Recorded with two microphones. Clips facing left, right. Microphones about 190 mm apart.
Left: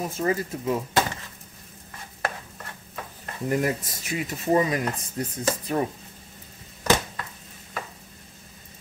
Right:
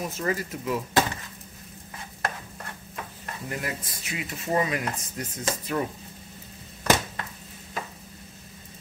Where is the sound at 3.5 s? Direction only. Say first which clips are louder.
Left 9 dB; 40° left (ahead or behind).